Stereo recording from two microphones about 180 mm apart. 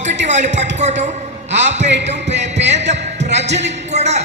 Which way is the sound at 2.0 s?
75° right (ahead or behind).